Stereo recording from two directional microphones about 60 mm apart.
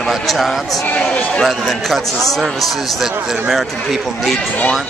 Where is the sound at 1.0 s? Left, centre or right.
Centre.